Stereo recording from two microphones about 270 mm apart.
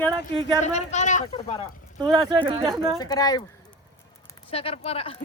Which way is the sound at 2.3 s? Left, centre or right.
Centre.